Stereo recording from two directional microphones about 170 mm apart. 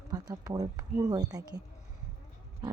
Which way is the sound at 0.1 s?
20° right (ahead or behind).